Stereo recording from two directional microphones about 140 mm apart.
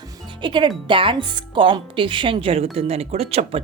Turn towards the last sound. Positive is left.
turn(degrees=-45)  # may be behind; listen again after turning